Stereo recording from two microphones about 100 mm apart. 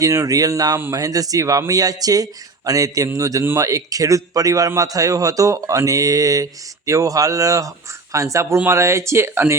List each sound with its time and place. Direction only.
0.0 s a man's voice: 35° right (ahead or behind)